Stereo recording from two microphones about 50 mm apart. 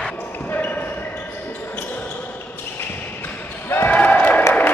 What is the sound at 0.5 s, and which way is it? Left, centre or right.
Basketball bounce, left.